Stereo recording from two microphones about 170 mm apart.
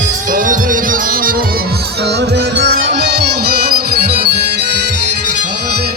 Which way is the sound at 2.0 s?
80° right.